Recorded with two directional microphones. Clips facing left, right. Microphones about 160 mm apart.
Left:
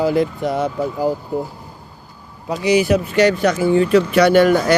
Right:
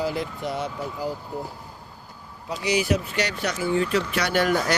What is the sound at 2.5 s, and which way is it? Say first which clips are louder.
Speech: left 8 dB; 50° left (ahead or behind).